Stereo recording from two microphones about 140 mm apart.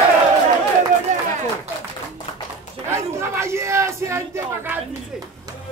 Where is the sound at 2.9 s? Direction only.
20° right (ahead or behind).